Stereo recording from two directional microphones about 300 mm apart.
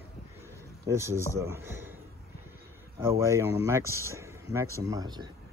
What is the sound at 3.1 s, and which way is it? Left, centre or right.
Speech, centre.